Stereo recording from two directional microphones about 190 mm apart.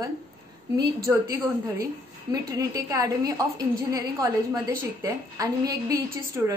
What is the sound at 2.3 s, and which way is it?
A woman's voice, 20° right (ahead or behind).